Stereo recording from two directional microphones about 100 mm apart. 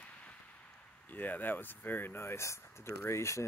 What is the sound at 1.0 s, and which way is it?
Speech, 15° left (ahead or behind).